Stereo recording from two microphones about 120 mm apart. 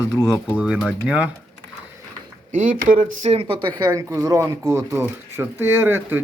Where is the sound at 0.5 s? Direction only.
10° right (ahead or behind).